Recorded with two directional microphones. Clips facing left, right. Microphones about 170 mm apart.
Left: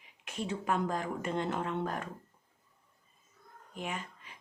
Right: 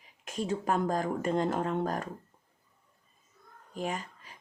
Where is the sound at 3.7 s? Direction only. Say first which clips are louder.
Right 5 dB; 40° right (ahead or behind).